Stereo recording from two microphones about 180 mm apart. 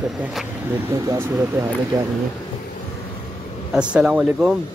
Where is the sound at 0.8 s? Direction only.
15° right (ahead or behind).